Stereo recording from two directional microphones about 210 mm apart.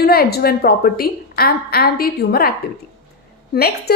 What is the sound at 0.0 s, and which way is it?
A woman's voice, 45° left (ahead or behind).